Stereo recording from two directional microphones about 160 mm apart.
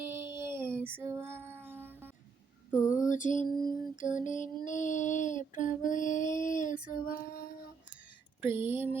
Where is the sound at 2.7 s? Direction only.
20° left (ahead or behind).